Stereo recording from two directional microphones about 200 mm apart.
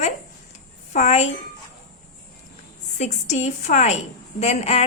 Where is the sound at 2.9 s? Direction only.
35° left (ahead or behind).